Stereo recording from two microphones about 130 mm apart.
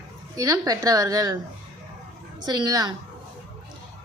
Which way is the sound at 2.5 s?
30° right (ahead or behind).